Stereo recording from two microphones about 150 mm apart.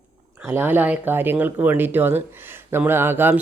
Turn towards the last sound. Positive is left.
turn(degrees=-15)  # may be behind; listen again after turning